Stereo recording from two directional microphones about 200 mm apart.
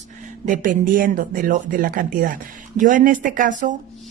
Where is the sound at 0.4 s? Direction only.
40° right (ahead or behind).